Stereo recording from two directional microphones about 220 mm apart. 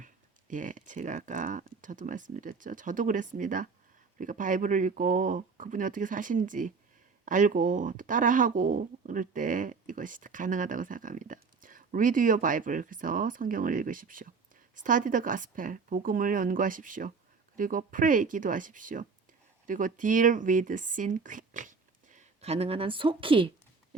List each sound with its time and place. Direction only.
0.0 s speech: 35° right (ahead or behind)